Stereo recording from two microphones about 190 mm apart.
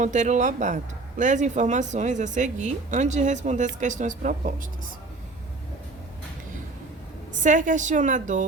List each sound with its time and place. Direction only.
0.0 s speech: 40° right (ahead or behind)
7.3 s speech: 40° right (ahead or behind)